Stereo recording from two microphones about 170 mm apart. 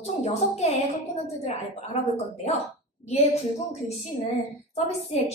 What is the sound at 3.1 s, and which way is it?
A woman's voice, 40° left (ahead or behind).